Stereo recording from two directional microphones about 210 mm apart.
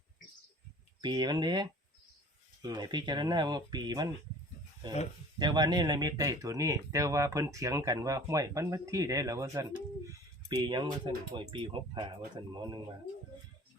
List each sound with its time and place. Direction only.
1.0 s speech: 20° right (ahead or behind)
5.4 s speech: 20° right (ahead or behind)